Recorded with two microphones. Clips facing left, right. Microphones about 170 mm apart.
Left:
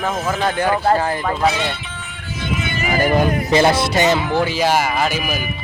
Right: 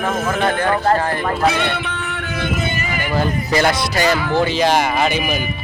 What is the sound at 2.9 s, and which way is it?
Music, 40° left (ahead or behind).